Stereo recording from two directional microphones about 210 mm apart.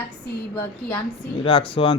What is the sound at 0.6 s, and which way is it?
Speech, 5° left (ahead or behind).